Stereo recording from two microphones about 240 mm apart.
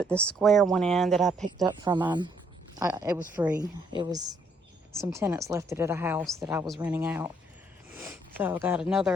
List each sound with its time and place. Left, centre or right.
0.0 s speech: centre
1.6 s speech: centre
4.9 s speech: centre
7.9 s a sound: centre
8.4 s speech: centre